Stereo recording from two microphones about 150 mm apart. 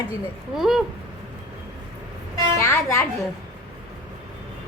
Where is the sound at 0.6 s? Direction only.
Centre (ahead or behind).